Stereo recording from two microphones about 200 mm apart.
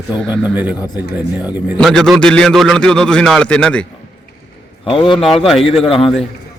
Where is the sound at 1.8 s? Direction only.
Centre (ahead or behind).